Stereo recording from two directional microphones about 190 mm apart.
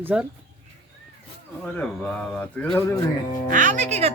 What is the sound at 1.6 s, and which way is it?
A man's voice, 5° left (ahead or behind).